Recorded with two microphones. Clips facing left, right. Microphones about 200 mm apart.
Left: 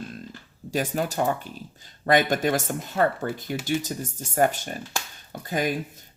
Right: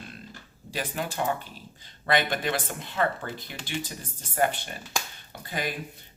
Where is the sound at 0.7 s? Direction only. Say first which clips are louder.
Left 6 dB; 45° left (ahead or behind).